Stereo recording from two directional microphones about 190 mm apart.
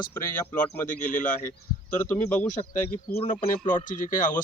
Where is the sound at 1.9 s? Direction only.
10° left (ahead or behind).